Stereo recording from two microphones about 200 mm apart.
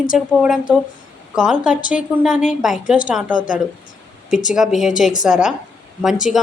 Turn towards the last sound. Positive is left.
turn(degrees=0)  # may be behind; listen again after turning